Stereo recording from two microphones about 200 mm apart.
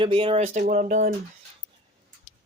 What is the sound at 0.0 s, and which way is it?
Speech, 25° right (ahead or behind).